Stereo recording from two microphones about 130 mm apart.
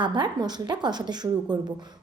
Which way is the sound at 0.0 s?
35° right (ahead or behind).